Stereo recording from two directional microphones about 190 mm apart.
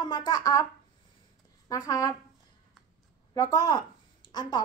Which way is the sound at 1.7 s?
20° left (ahead or behind).